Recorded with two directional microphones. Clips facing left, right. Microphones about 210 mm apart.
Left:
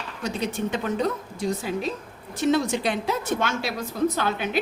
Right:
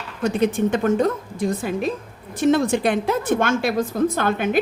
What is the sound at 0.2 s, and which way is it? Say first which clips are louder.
A woman's voice: right 8 dB; 55° right (ahead or behind).